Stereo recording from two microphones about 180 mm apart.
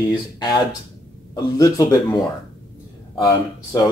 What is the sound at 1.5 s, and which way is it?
Speech, 20° left (ahead or behind).